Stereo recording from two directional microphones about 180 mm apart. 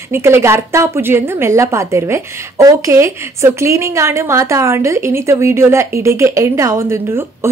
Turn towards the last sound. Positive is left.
turn(degrees=-15)  # may be behind; listen again after turning